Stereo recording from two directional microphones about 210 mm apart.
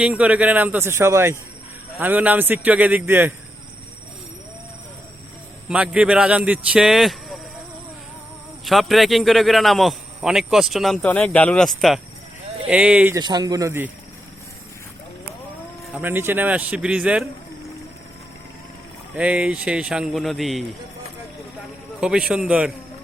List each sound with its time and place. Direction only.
0.0 s speech: 5° right (ahead or behind)
5.6 s a man's voice: 5° right (ahead or behind)
8.6 s a man's voice: centre (ahead or behind)
13.1 s speech: 20° right (ahead or behind)
16.0 s speech: 10° right (ahead or behind)
19.1 s a man's voice: 5° right (ahead or behind)
22.0 s a man's voice: 5° right (ahead or behind)